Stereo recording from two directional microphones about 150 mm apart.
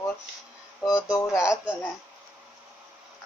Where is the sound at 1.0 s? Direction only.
25° left (ahead or behind).